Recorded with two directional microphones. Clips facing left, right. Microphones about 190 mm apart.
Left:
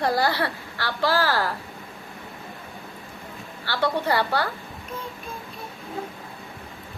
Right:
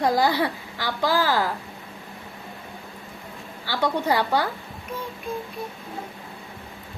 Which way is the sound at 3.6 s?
15° right (ahead or behind).